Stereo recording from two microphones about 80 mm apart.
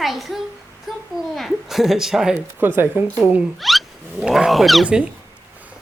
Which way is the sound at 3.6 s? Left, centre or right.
Centre.